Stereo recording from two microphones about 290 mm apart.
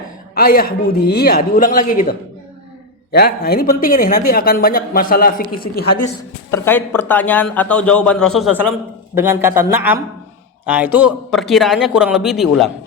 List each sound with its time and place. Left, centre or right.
0.3 s a man's voice: left
6.5 s a man's voice: centre
9.1 s a man's voice: centre